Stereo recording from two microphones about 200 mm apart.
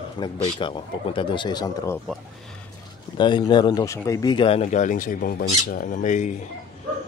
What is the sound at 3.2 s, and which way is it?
Speech, 20° left (ahead or behind).